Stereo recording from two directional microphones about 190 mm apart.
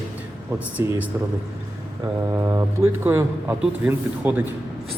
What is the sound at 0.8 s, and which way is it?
Speech, 15° right (ahead or behind).